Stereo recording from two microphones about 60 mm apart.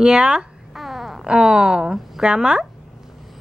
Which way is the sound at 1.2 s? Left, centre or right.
Centre.